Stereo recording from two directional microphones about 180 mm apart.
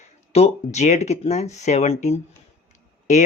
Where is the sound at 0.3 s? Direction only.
35° left (ahead or behind).